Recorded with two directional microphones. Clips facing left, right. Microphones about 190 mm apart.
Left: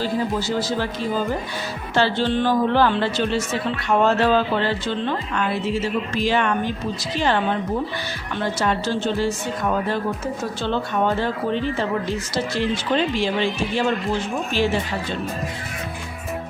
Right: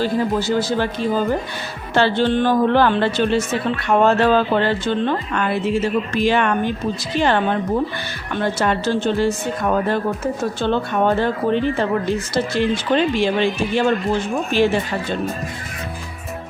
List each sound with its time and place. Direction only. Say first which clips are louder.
0.0 s a man's voice: right 4 dB; 55° right (ahead or behind)
2.0 s a man's voice: right 3 dB; 55° right (ahead or behind)